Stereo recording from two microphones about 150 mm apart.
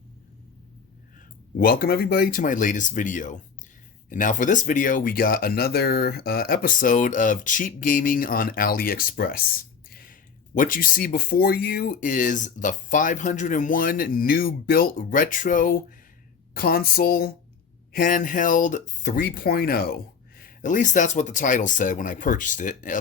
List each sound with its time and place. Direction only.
1.5 s speech: 75° left (ahead or behind)
16.6 s a sound: 85° left
17.9 s speech: 65° left (ahead or behind)